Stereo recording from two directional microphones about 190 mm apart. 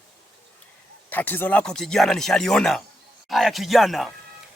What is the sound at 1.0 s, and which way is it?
Speech, 10° left (ahead or behind).